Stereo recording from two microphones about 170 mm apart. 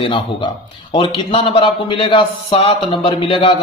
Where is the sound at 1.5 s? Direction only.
30° left (ahead or behind).